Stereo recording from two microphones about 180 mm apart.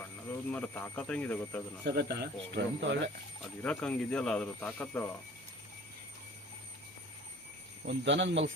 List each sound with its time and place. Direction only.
0.0 s speech: 10° left (ahead or behind)
1.8 s speech: 65° right (ahead or behind)
3.6 s speech: 5° left (ahead or behind)
7.9 s speech: 85° right